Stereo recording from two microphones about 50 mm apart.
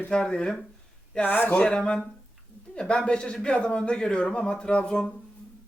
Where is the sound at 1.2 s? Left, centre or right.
Left.